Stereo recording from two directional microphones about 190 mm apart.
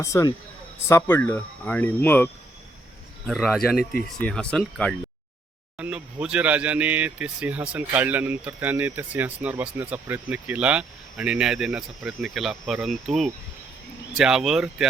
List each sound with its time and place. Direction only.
0.0 s speech: 15° left (ahead or behind)
3.2 s speech: centre (ahead or behind)
5.7 s speech: 5° right (ahead or behind)